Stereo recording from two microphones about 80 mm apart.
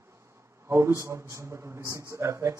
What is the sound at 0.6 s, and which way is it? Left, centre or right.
A man's voice, right.